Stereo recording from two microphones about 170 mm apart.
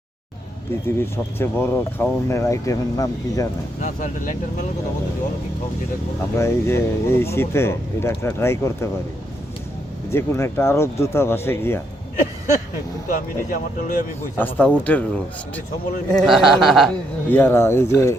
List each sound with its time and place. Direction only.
0.9 s speech: 15° left (ahead or behind)
3.8 s speech: 45° left (ahead or behind)
6.3 s speech: 15° left (ahead or behind)
10.1 s speech: 15° left (ahead or behind)
13.1 s speech: 55° left (ahead or behind)
14.3 s speech: 10° left (ahead or behind)